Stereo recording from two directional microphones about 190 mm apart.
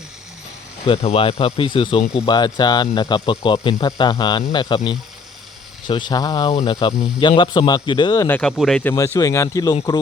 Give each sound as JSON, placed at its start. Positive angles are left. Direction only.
{"t": 0.9, "sound": "speech", "side_deg": 30}
{"t": 5.9, "sound": "speech", "side_deg": 20}
{"t": 8.4, "sound": "speech", "side_deg": 5}